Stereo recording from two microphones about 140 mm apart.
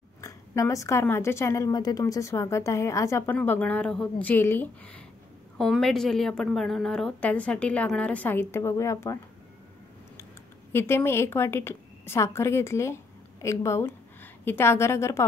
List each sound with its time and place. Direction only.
0.2 s a woman's voice: 25° left (ahead or behind)
10.7 s a woman's voice: 15° left (ahead or behind)